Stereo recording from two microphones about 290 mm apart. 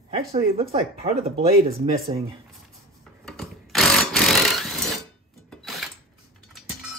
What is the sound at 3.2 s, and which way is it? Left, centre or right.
Sewing machine, centre.